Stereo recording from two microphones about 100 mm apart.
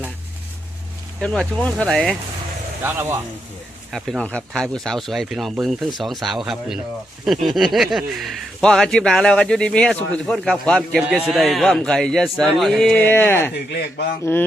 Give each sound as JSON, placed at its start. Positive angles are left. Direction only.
{"t": 1.2, "sound": "speech", "side_deg": 10}
{"t": 2.8, "sound": "speech", "side_deg": -20}
{"t": 3.9, "sound": "speech", "side_deg": 0}
{"t": 4.2, "sound": "speech", "side_deg": 10}
{"t": 13.0, "sound": "speech", "side_deg": 20}